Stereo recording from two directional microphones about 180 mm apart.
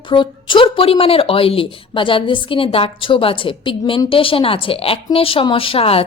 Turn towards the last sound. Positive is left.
turn(degrees=30)  # may be behind; listen again after turning